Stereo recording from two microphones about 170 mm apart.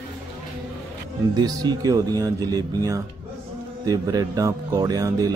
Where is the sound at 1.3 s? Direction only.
25° right (ahead or behind).